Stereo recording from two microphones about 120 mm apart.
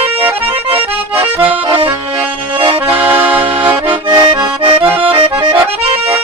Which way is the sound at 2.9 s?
15° right (ahead or behind).